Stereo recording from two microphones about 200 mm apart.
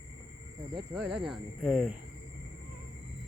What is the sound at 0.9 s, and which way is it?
Speech, 5° right (ahead or behind).